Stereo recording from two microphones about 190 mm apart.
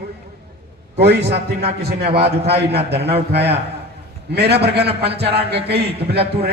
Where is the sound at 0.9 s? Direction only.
60° right (ahead or behind).